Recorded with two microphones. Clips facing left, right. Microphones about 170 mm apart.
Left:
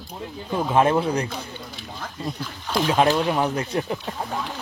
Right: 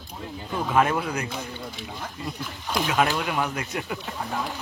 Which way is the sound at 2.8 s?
35° left (ahead or behind).